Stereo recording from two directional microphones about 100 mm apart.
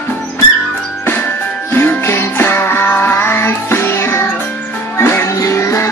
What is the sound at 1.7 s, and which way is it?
Music, 20° left (ahead or behind).